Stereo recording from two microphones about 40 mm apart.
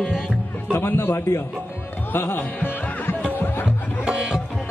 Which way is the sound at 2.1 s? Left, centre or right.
Left.